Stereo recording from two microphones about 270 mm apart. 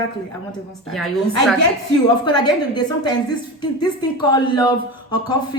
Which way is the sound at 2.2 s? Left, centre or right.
Centre.